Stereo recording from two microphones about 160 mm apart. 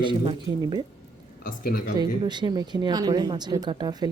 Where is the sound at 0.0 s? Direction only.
30° right (ahead or behind).